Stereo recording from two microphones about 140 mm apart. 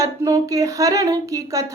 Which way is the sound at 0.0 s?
20° right (ahead or behind).